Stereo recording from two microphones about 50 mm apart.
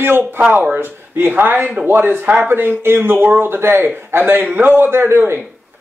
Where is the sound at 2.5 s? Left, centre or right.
Right.